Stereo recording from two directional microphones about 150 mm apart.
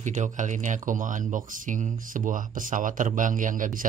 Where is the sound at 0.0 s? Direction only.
55° right (ahead or behind).